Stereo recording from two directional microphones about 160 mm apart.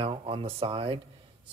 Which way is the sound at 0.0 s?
35° right (ahead or behind).